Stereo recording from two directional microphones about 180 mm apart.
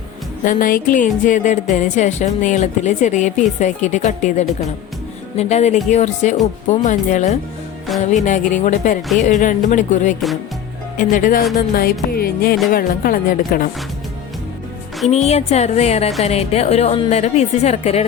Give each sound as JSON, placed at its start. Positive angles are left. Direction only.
{"t": 0.4, "sound": "music", "side_deg": 50}
{"t": 1.7, "sound": "a woman's voice", "side_deg": 45}
{"t": 8.1, "sound": "music", "side_deg": 45}
{"t": 15.0, "sound": "a woman's voice", "side_deg": 35}